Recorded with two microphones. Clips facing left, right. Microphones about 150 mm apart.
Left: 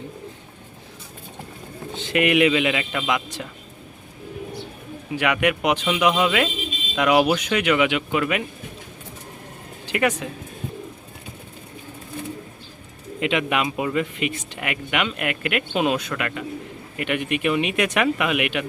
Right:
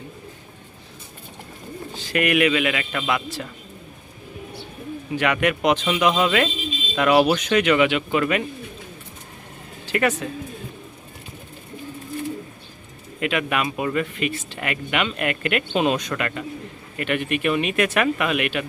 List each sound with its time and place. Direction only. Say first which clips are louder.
2.0 s a man's voice: left 2 dB; 20° left (ahead or behind)
5.1 s speech: even; 10° left (ahead or behind)
9.9 s speech: even; 10° left (ahead or behind)
13.1 s speech: left 1 dB; 20° left (ahead or behind)